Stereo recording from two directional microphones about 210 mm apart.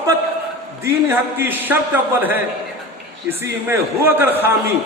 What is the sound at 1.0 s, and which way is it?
Speech, 10° right (ahead or behind).